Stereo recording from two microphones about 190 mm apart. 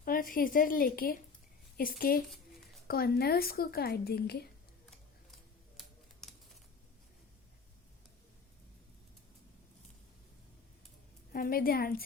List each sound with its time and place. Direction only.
0.0 s a woman's voice: 50° left (ahead or behind)
11.3 s a woman's voice: 50° left (ahead or behind)